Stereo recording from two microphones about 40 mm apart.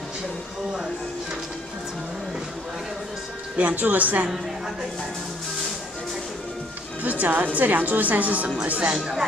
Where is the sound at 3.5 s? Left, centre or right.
Right.